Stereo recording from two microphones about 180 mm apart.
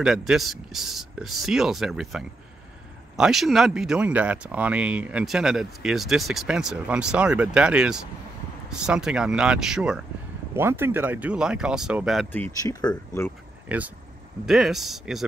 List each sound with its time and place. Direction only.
0.0 s speech: centre (ahead or behind)
12.3 s speech: 10° left (ahead or behind)
13.7 s speech: 10° right (ahead or behind)